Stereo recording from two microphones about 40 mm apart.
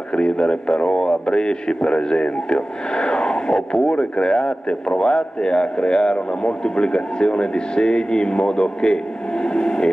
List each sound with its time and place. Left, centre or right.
0.1 s a man's voice: left